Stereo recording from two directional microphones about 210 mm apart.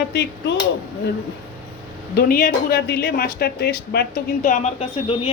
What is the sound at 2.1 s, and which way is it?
Speech, 45° left (ahead or behind).